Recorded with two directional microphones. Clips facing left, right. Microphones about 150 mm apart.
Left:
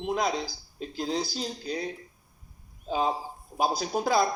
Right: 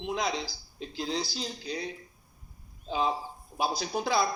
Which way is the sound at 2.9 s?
45° left (ahead or behind).